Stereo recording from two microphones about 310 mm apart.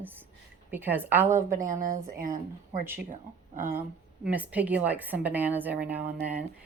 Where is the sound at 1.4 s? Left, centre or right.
Right.